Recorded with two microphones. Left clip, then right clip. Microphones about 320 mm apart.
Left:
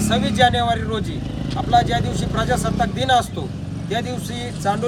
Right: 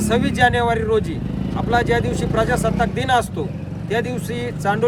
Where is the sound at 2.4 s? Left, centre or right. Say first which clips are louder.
Right 1 dB; centre.